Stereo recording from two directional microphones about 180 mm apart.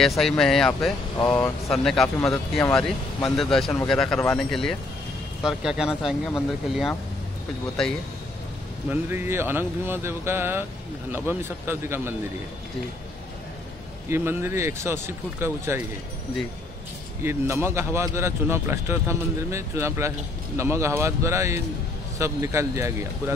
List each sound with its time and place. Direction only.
0.0 s speech: centre (ahead or behind)
8.9 s speech: 10° right (ahead or behind)
14.0 s speech: 15° right (ahead or behind)
17.2 s speech: 15° right (ahead or behind)